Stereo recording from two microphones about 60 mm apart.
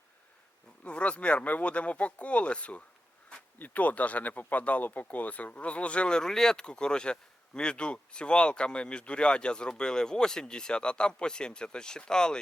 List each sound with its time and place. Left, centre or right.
0.9 s speech: centre